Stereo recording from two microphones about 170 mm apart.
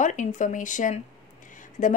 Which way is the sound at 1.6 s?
50° left (ahead or behind).